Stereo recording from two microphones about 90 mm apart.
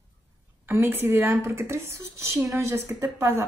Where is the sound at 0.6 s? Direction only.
25° right (ahead or behind).